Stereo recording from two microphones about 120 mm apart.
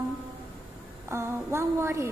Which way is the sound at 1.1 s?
20° right (ahead or behind).